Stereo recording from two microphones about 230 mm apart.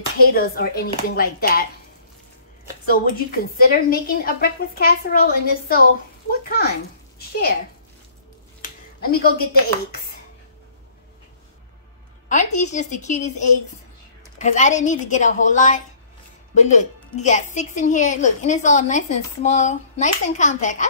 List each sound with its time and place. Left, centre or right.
0.3 s a woman's voice: left
2.9 s a woman's voice: left
9.0 s a woman's voice: left
12.3 s a woman's voice: left